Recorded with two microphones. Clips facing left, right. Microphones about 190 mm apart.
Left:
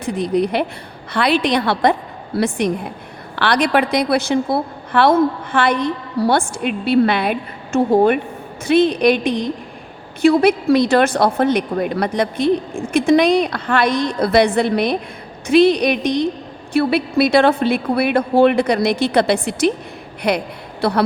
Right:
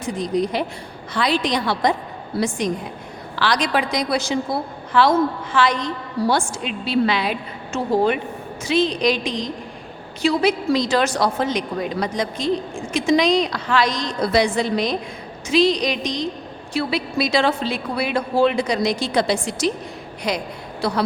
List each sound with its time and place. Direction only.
0.0 s a woman's voice: 60° left (ahead or behind)